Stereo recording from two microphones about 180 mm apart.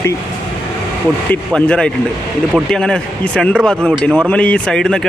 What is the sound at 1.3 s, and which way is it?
Speech, 5° left (ahead or behind).